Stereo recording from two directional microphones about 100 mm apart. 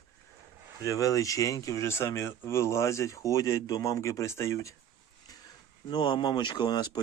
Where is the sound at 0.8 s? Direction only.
35° left (ahead or behind).